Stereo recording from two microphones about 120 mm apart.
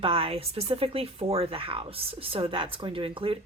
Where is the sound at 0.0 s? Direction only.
50° right (ahead or behind).